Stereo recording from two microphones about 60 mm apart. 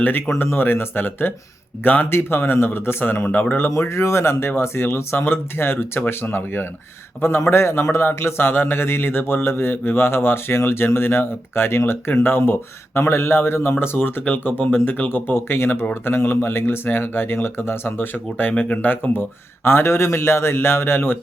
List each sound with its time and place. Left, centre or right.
0.0 s speech: left
3.8 s a man's voice: left
19.6 s a man's voice: left